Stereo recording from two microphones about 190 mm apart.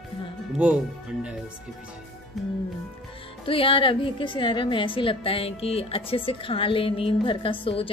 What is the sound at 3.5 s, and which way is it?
A woman's voice, 30° left (ahead or behind).